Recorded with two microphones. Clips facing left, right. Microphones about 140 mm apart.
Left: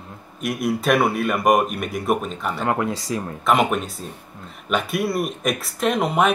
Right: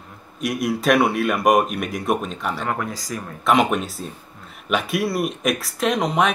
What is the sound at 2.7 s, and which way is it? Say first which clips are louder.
Speech: left 4 dB; 25° left (ahead or behind).